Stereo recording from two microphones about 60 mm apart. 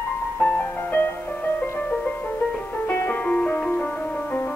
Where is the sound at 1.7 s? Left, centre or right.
Centre.